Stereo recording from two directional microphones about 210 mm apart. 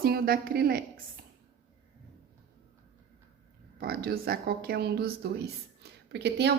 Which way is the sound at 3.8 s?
45° right (ahead or behind).